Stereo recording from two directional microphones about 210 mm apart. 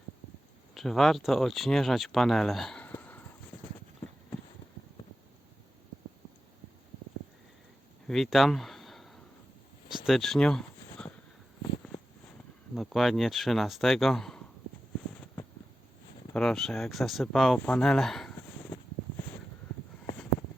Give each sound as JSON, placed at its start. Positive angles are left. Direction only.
{"t": 0.7, "sound": "speech", "side_deg": 0}
{"t": 8.0, "sound": "a sound", "side_deg": 0}
{"t": 12.7, "sound": "speech", "side_deg": 0}
{"t": 16.3, "sound": "speech", "side_deg": 5}